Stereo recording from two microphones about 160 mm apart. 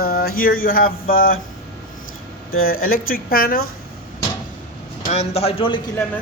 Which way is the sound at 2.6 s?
65° left (ahead or behind).